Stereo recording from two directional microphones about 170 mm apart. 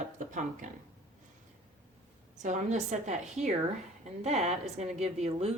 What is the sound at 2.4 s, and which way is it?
A woman's voice, 45° right (ahead or behind).